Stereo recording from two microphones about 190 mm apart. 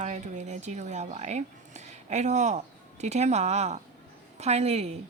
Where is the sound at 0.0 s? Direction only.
35° right (ahead or behind).